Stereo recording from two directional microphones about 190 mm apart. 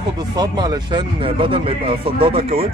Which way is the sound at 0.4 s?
20° right (ahead or behind).